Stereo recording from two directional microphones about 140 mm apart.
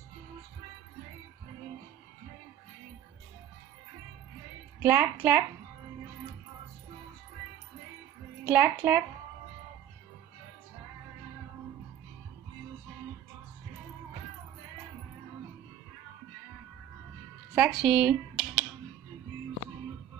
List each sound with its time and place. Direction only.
4.8 s a woman's voice: 15° right (ahead or behind)
8.5 s a woman's voice: 15° right (ahead or behind)
17.6 s a sound: 5° right (ahead or behind)